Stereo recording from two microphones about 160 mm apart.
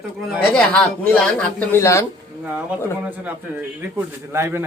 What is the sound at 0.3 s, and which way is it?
Speech, 5° left (ahead or behind).